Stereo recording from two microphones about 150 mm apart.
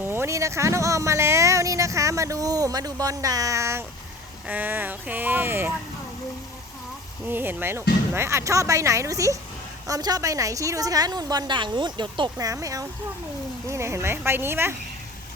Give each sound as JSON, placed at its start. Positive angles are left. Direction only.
{"t": 0.0, "sound": "speech", "side_deg": -15}
{"t": 7.3, "sound": "speech", "side_deg": -15}